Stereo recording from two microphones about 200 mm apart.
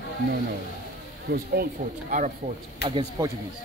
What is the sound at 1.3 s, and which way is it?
Speech, 50° right (ahead or behind).